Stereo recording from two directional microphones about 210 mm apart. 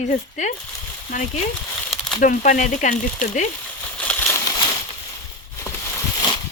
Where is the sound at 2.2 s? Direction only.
40° left (ahead or behind).